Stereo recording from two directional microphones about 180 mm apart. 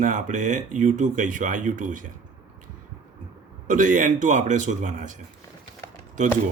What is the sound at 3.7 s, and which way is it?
Speech, 45° right (ahead or behind).